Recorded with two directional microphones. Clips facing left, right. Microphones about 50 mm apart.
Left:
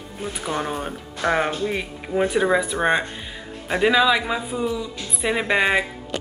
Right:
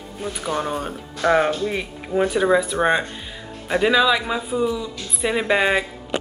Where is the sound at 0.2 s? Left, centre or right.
Left.